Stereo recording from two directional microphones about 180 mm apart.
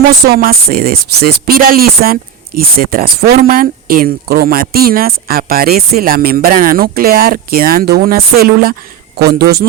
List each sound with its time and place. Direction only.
0.3 s speech: 55° right (ahead or behind)